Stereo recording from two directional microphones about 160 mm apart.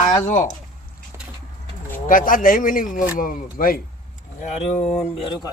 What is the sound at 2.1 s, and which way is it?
Speech, 55° left (ahead or behind).